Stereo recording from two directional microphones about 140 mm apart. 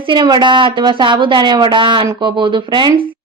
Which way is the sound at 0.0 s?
35° right (ahead or behind).